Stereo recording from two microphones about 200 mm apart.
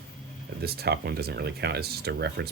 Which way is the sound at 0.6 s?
50° right (ahead or behind).